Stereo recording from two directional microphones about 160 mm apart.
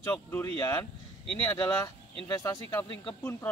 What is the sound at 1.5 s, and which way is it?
Speech, 25° left (ahead or behind).